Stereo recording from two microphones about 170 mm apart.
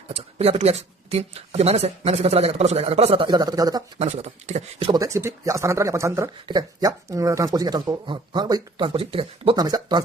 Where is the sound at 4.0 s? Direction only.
40° right (ahead or behind).